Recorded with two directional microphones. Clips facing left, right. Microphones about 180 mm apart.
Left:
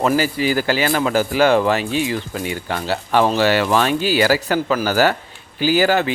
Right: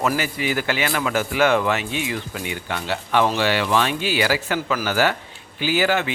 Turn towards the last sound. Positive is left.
turn(degrees=40)  # may be behind; listen again after turning